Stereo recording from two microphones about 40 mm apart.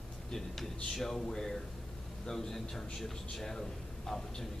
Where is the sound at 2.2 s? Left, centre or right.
Centre.